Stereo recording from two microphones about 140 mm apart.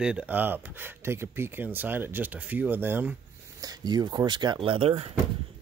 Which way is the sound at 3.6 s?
30° right (ahead or behind).